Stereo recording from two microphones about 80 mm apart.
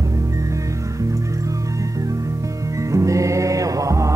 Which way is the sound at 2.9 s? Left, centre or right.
Right.